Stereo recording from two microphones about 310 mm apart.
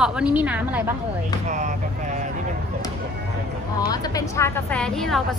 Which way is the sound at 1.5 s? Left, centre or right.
Right.